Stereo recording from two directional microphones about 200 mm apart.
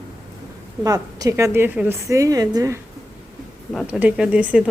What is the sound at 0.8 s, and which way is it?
A woman's voice, 15° right (ahead or behind).